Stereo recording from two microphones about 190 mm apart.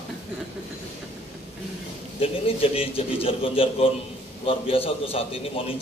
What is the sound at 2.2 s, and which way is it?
A man's voice, 30° left (ahead or behind).